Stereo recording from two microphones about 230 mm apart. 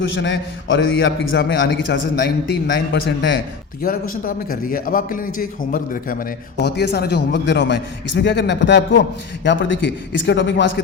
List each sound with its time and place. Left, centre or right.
0.2 s a man's voice: left
3.8 s a man's voice: left